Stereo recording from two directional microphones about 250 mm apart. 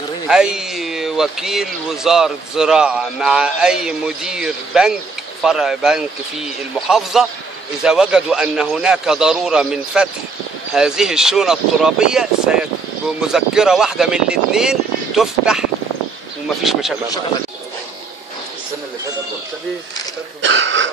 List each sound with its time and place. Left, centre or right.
0.3 s speech: centre
20.4 s speech: right